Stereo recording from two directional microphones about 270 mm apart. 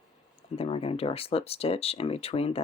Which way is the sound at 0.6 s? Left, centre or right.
Left.